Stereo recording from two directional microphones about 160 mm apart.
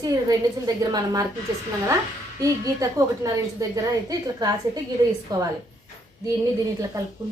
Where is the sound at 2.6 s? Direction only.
20° right (ahead or behind).